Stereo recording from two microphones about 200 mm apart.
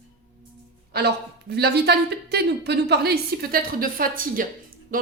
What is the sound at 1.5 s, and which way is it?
Speech, 55° right (ahead or behind).